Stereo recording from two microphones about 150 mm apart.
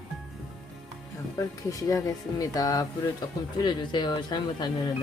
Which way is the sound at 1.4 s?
20° left (ahead or behind).